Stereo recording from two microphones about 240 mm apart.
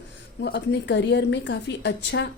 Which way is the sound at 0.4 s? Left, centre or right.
Left.